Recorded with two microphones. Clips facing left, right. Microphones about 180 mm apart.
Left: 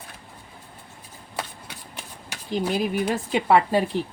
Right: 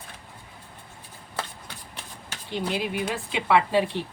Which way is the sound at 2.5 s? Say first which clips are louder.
Left 4 dB; 40° left (ahead or behind).